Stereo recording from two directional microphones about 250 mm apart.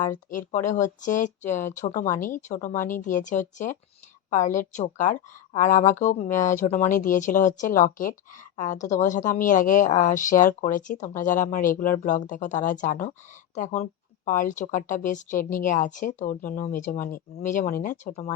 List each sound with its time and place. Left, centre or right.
0.0 s speech: left